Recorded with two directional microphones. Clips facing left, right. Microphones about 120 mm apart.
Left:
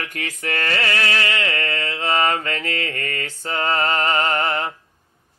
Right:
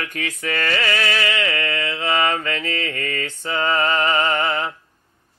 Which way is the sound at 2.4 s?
40° left (ahead or behind).